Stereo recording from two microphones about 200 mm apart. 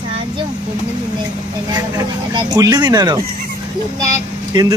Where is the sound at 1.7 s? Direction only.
20° right (ahead or behind).